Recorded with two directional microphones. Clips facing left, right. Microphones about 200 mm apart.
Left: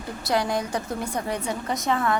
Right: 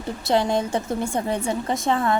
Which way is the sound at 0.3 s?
25° right (ahead or behind).